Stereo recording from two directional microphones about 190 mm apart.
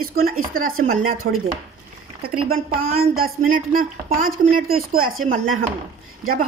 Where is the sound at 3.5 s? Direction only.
45° right (ahead or behind).